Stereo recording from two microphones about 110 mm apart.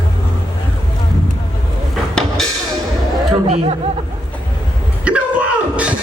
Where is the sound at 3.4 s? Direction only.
90° right.